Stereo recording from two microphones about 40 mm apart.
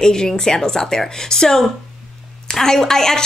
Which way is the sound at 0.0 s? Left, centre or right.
Centre.